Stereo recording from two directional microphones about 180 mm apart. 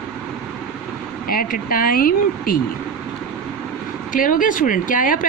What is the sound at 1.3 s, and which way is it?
Speech, 55° left (ahead or behind).